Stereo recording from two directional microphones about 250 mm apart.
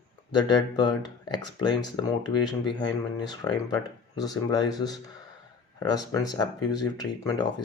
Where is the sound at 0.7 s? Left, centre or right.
Centre.